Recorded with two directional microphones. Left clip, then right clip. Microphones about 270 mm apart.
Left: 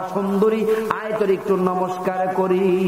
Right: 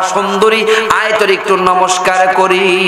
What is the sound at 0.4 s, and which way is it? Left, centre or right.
A man's voice, centre.